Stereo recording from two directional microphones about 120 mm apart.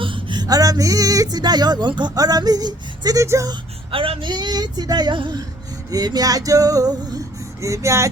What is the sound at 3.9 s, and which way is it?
Speech, 45° right (ahead or behind).